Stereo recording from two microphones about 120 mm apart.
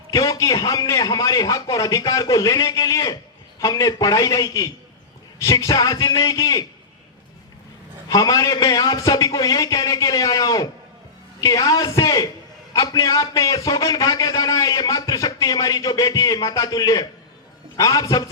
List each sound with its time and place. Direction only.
0.1 s a man's voice: 30° left (ahead or behind)
8.1 s a man's voice: 30° left (ahead or behind)